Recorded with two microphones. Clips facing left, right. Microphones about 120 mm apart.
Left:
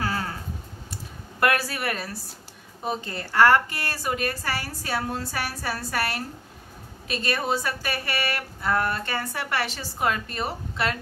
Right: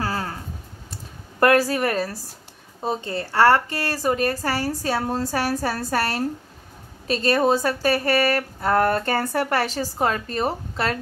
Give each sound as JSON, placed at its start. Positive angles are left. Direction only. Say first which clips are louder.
{"t": 0.0, "sound": "a sound", "louder": "right 2 dB", "side_deg": -35}
{"t": 1.4, "sound": "speech", "louder": "right 7 dB", "side_deg": -35}
{"t": 2.8, "sound": "speech", "louder": "right 4 dB", "side_deg": -25}